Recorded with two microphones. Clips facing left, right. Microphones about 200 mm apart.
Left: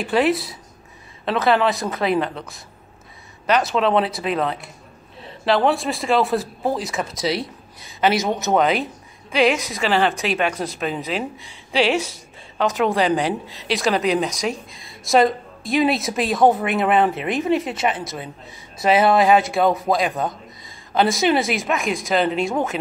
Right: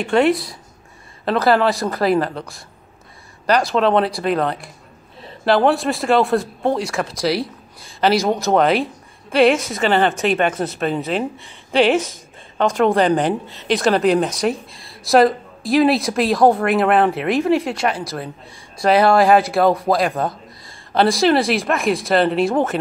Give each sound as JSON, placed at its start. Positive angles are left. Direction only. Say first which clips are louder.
{"t": 0.0, "sound": "a woman's voice", "louder": "right 3 dB", "side_deg": 5}
{"t": 7.8, "sound": "a woman's voice", "louder": "right 3 dB", "side_deg": 20}
{"t": 8.5, "sound": "a woman's voice", "louder": "right 2 dB", "side_deg": 0}